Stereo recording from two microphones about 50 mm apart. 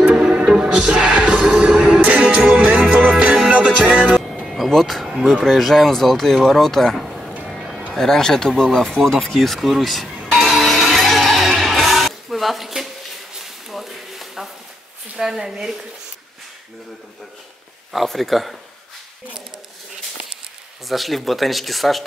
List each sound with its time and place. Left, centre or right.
0.0 s music: centre
4.1 s music: centre
4.6 s speech: centre
10.2 s music: centre
13.3 s a sound: centre
15.1 s a woman's voice: centre
17.9 s speech: centre
20.9 s speech: centre